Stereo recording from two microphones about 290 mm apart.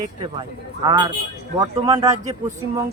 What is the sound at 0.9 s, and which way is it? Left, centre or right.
Speech, centre.